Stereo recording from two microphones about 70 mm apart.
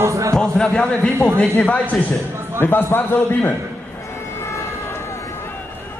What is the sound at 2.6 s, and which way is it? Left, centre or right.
Speech, left.